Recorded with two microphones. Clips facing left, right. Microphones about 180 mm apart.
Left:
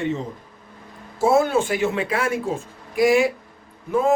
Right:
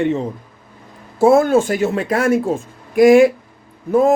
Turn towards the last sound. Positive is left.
turn(degrees=-40)  # may be behind; listen again after turning